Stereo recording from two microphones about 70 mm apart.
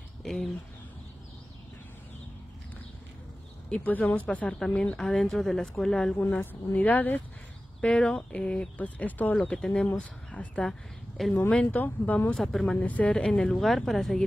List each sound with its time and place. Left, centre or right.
0.2 s a sound: centre
4.1 s speech: centre
6.1 s speech: left
7.8 s speech: centre
11.2 s speech: centre
11.7 s speech: left
12.4 s speech: centre
12.6 s speech: centre
13.6 s speech: centre